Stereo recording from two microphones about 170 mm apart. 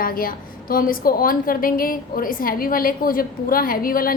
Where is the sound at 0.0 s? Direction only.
55° left (ahead or behind).